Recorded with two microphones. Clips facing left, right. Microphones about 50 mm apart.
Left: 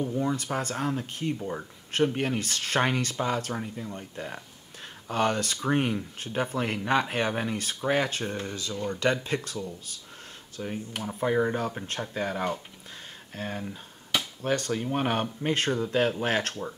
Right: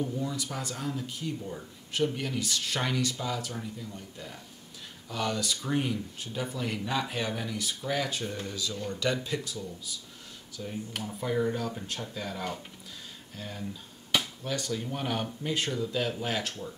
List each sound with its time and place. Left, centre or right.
0.2 s speech: left
10.6 s speech: left